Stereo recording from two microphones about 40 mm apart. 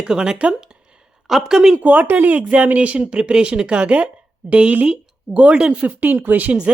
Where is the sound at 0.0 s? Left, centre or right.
Centre.